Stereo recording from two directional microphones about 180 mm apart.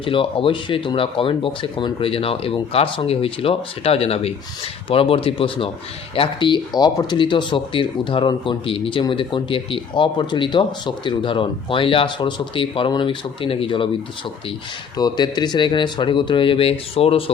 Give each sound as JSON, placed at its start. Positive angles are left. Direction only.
{"t": 0.0, "sound": "speech", "side_deg": 30}
{"t": 14.9, "sound": "speech", "side_deg": 20}